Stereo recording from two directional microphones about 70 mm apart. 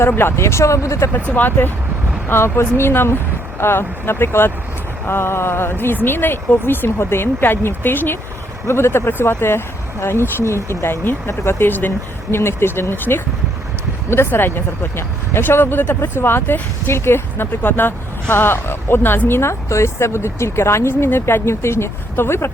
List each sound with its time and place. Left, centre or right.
0.2 s speech: left
1.1 s speech: left